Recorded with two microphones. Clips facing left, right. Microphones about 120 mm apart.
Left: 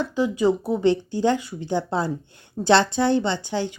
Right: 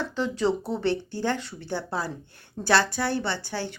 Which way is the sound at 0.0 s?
15° left (ahead or behind).